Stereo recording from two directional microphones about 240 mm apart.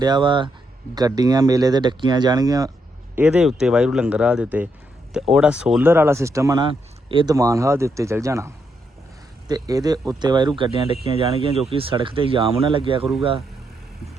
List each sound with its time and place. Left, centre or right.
0.0 s speech: centre
3.2 s speech: centre; by 13.1 s right